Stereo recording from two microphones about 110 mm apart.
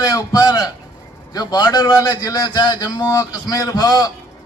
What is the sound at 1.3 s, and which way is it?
A man's voice, 40° left (ahead or behind).